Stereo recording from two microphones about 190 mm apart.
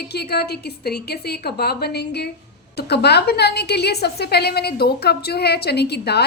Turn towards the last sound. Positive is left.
turn(degrees=60)  # may be behind; listen again after turning